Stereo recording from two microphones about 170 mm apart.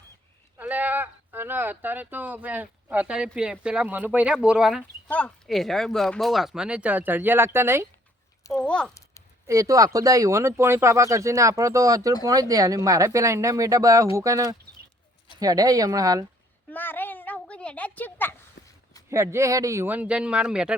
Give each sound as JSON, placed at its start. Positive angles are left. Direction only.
{"t": 0.6, "sound": "speech", "side_deg": -10}
{"t": 5.0, "sound": "speech", "side_deg": 10}
{"t": 8.6, "sound": "speech", "side_deg": 5}
{"t": 9.5, "sound": "speech", "side_deg": -20}
{"t": 16.6, "sound": "a sound", "side_deg": 10}
{"t": 19.1, "sound": "speech", "side_deg": -15}